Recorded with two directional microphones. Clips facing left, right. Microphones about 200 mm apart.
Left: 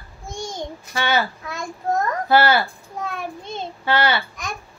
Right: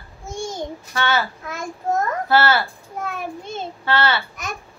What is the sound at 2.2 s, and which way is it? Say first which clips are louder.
Speech: left 2 dB; 15° left (ahead or behind).